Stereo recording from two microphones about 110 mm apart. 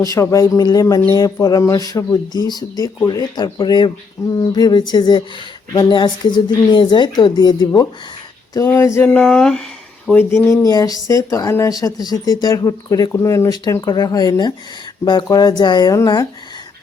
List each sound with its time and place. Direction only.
0.0 s a woman's voice: 30° left (ahead or behind)
8.5 s a sound: 25° left (ahead or behind)
9.0 s speech: 10° left (ahead or behind)
10.1 s speech: 20° left (ahead or behind)
10.6 s speech: 35° left (ahead or behind)